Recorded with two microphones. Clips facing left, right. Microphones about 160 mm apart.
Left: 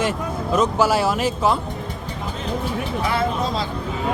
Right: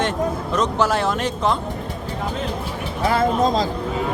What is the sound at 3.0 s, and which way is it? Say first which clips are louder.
Speech: right 6 dB; 45° right (ahead or behind).